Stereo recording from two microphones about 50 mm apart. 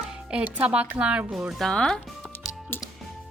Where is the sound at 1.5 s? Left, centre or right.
Centre.